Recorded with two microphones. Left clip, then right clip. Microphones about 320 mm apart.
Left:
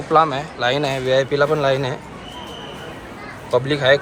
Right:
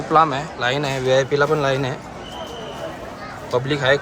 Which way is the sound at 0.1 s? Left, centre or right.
Centre.